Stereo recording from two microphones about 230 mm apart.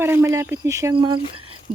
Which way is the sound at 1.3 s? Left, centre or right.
Right.